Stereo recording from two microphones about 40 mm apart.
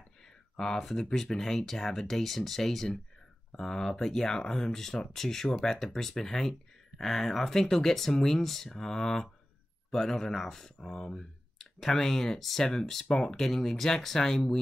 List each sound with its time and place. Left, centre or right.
0.6 s speech: centre
10.8 s speech: left